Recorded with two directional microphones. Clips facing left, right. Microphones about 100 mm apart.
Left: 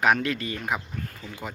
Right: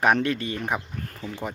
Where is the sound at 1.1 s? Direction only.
40° right (ahead or behind).